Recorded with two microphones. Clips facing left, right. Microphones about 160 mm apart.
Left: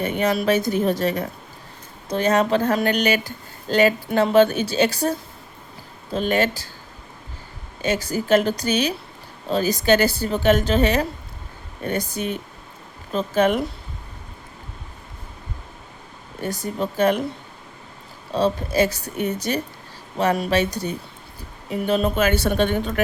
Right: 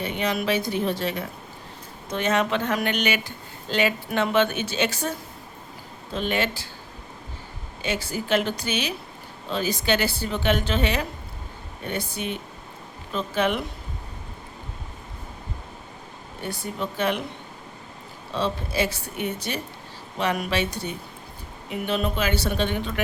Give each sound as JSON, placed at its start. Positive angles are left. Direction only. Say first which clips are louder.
{"t": 0.0, "sound": "speech", "louder": "left 5 dB", "side_deg": 45}
{"t": 6.1, "sound": "speech", "louder": "left 5 dB", "side_deg": 40}
{"t": 7.8, "sound": "speech", "louder": "left 5 dB", "side_deg": 40}
{"t": 16.4, "sound": "speech", "louder": "left 5 dB", "side_deg": 40}
{"t": 18.3, "sound": "speech", "louder": "left 6 dB", "side_deg": 40}